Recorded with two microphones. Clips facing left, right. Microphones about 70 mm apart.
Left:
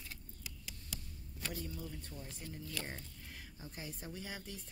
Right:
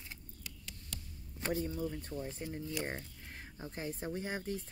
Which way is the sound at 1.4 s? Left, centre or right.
Right.